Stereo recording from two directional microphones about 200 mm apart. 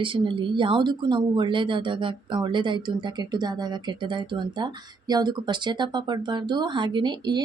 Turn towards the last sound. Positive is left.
turn(degrees=-20)  # may be behind; listen again after turning